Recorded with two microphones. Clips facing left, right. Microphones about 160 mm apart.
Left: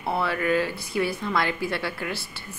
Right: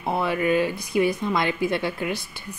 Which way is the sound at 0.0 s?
15° right (ahead or behind).